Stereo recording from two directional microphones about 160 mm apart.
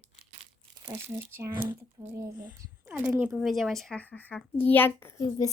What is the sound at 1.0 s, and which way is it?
Speech, 15° right (ahead or behind).